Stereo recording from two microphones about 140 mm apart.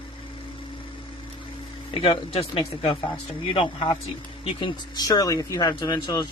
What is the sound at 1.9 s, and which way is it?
Speech, 40° left (ahead or behind).